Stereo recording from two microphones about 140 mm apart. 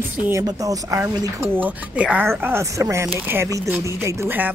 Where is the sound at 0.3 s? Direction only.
25° right (ahead or behind).